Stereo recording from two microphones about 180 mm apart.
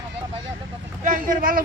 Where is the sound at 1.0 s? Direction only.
50° right (ahead or behind).